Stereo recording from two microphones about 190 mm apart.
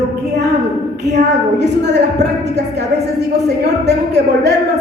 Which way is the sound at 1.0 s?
65° right (ahead or behind).